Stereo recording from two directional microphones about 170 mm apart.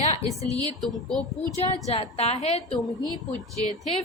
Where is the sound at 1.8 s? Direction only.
35° left (ahead or behind).